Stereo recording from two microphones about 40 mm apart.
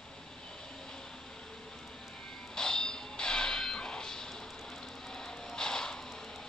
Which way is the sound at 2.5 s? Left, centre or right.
Centre.